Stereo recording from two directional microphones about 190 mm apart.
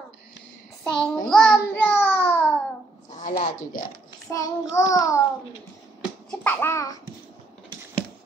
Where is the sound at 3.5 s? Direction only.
40° left (ahead or behind).